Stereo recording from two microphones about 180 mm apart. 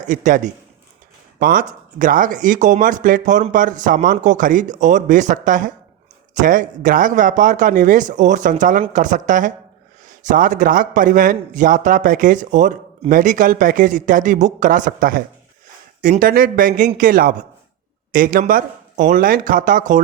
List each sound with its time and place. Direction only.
0.0 s a man's voice: 45° right (ahead or behind)